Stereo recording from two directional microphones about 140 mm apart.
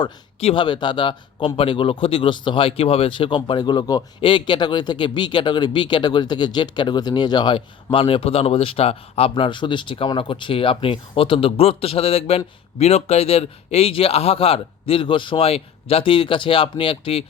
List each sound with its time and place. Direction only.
0.3 s speech: 50° left (ahead or behind)
0.6 s speech: 35° left (ahead or behind)